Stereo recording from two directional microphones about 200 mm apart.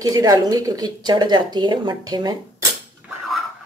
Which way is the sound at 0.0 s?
20° right (ahead or behind).